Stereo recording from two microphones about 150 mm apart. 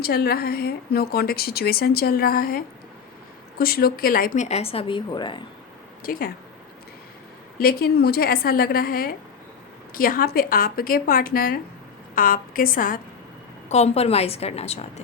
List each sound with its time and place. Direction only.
0.0 s a woman's voice: 90° left
3.6 s a woman's voice: 90° left; by 4.4 s 70° left (ahead or behind)
4.4 s a woman's voice: 40° left (ahead or behind)
6.0 s speech: 75° left (ahead or behind)
7.6 s a woman's voice: 85° left; by 13.0 s 65° left (ahead or behind)
13.7 s a woman's voice: 45° left (ahead or behind)